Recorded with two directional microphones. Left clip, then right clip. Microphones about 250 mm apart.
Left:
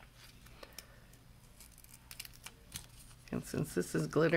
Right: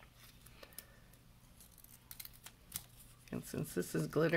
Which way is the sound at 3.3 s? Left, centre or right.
Centre.